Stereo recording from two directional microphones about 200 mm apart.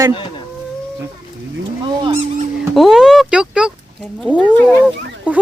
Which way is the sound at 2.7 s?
Centre (ahead or behind).